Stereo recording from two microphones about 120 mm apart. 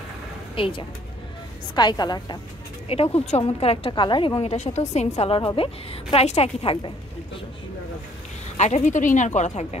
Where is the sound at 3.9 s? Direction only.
40° left (ahead or behind).